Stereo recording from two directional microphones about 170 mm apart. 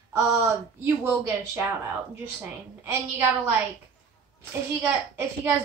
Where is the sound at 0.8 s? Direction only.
15° right (ahead or behind).